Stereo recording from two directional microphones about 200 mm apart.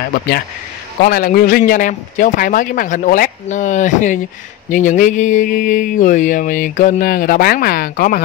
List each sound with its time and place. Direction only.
1.0 s mantra: 45° left (ahead or behind)